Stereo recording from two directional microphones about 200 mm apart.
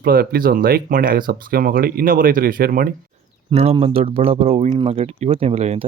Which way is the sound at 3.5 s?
30° right (ahead or behind).